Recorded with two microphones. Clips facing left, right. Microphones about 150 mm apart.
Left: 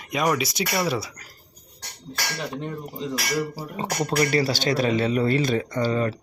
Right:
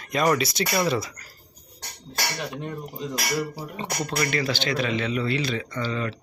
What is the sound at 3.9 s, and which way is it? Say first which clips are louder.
A man's voice: left 5 dB; 30° left (ahead or behind).